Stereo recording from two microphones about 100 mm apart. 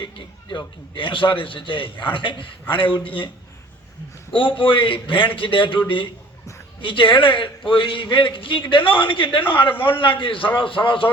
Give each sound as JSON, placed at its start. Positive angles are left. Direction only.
{"t": 0.5, "sound": "a man's voice", "side_deg": 60}
{"t": 4.4, "sound": "a man's voice", "side_deg": 60}
{"t": 6.8, "sound": "a man's voice", "side_deg": 60}